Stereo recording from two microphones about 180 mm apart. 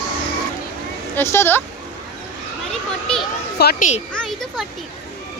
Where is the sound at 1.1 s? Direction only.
15° left (ahead or behind).